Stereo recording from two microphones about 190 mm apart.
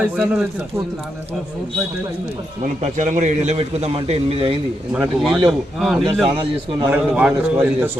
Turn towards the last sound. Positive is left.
turn(degrees=-5)  # may be behind; listen again after turning